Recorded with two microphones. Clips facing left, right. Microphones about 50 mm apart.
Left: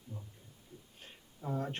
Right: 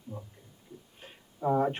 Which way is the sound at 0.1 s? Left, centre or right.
Right.